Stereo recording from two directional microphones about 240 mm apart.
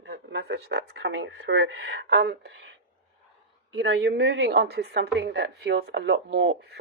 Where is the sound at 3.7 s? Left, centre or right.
Right.